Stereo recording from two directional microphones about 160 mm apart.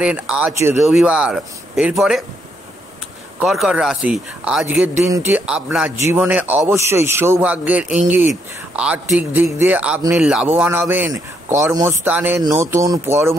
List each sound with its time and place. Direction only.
0.0 s a man's voice: 10° right (ahead or behind)
3.3 s a man's voice: 5° right (ahead or behind)